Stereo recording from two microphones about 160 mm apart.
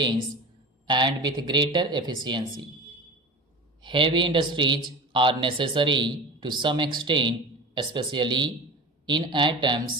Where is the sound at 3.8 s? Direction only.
30° right (ahead or behind).